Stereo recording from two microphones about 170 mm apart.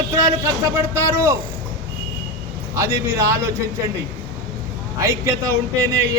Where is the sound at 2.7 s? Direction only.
15° right (ahead or behind).